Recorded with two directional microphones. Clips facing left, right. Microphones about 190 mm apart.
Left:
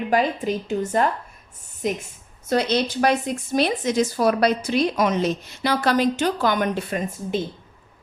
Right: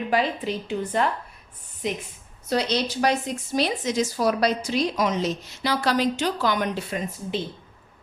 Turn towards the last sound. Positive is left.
turn(degrees=50)  # may be behind; listen again after turning